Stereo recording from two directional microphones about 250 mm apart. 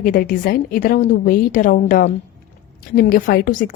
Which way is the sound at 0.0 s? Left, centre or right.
Left.